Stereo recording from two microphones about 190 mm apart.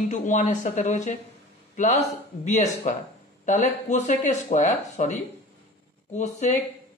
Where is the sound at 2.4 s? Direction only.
35° left (ahead or behind).